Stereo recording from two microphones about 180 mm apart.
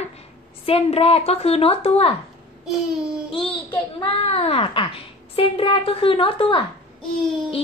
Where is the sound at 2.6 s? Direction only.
5° right (ahead or behind).